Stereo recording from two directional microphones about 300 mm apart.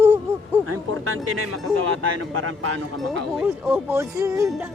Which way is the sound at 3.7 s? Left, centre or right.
Centre.